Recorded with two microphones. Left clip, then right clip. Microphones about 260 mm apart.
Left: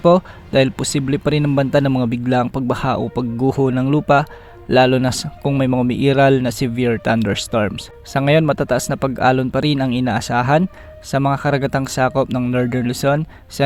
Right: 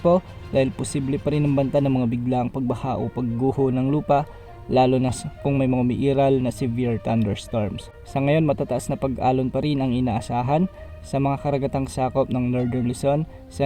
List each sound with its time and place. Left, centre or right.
0.0 s speech: left
3.7 s speech: left
3.9 s speech: left
12.3 s speech: left
12.9 s speech: left